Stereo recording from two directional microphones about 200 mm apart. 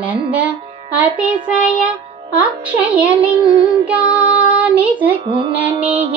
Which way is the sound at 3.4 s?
25° right (ahead or behind).